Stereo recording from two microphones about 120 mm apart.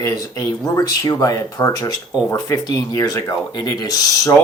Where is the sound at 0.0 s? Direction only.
30° left (ahead or behind).